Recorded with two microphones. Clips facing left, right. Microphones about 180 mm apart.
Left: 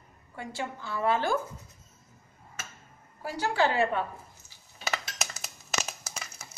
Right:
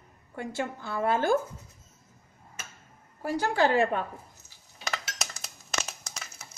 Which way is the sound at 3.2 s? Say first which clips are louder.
Right 2 dB; 50° right (ahead or behind).